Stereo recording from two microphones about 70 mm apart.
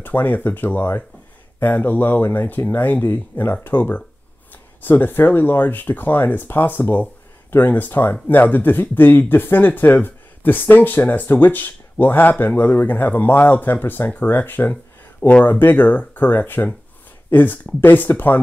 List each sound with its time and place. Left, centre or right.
0.0 s speech: left
14.7 s a sound: centre
15.6 s speech: left